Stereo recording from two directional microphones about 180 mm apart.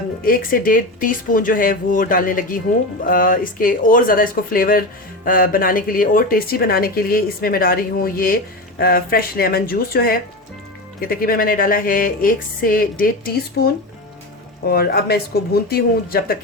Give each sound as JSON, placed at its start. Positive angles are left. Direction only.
{"t": 0.3, "sound": "speech", "side_deg": 50}
{"t": 14.7, "sound": "speech", "side_deg": 60}